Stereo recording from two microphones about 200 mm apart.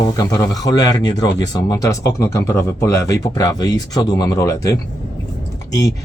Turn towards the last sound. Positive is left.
turn(degrees=15)  # may be behind; listen again after turning